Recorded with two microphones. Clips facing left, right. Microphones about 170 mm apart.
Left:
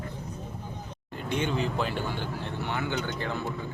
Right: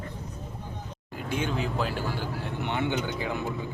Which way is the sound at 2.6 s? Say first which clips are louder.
Right 3 dB; 20° right (ahead or behind).